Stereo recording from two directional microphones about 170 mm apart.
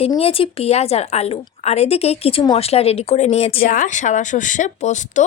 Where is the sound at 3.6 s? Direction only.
50° left (ahead or behind).